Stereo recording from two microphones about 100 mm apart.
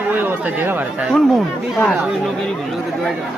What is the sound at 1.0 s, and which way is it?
Speech, centre (ahead or behind).